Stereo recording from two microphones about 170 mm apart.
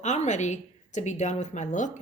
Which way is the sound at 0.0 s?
45° left (ahead or behind).